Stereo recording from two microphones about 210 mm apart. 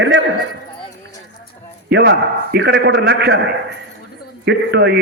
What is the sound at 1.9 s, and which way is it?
A man's voice, 55° right (ahead or behind).